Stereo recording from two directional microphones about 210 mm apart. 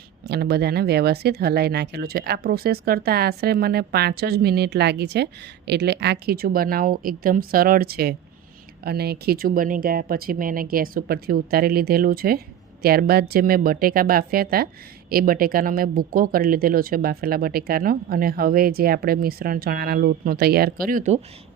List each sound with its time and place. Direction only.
0.3 s speech: 50° right (ahead or behind)